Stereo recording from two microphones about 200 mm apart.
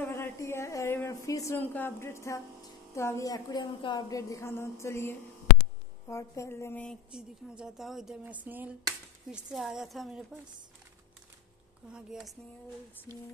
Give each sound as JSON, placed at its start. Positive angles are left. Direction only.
{"t": 0.0, "sound": "a woman's voice", "side_deg": 15}
{"t": 7.1, "sound": "speech", "side_deg": -5}
{"t": 11.9, "sound": "speech", "side_deg": 0}